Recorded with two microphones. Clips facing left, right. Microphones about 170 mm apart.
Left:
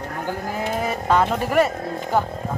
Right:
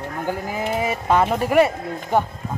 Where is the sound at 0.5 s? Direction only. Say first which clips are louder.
Even; 5° right (ahead or behind).